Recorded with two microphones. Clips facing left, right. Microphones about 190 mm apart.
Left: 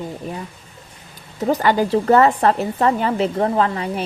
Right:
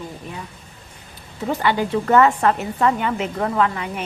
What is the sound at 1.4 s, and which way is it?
Speech, 40° left (ahead or behind).